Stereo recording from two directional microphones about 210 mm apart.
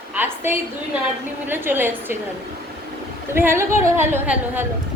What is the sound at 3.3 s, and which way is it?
Speech, 10° right (ahead or behind).